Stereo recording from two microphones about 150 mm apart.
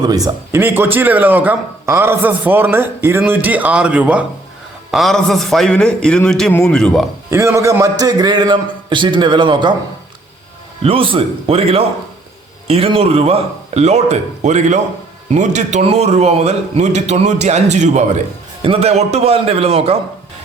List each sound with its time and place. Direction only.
0.0 s speech: 25° right (ahead or behind)
4.9 s a man's voice: centre (ahead or behind)
7.3 s a man's voice: 20° right (ahead or behind)
10.8 s a man's voice: 35° right (ahead or behind)